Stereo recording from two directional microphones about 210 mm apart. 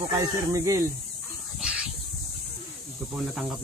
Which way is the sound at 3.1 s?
5° right (ahead or behind).